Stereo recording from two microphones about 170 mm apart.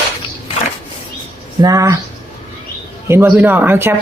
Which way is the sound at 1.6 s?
20° right (ahead or behind).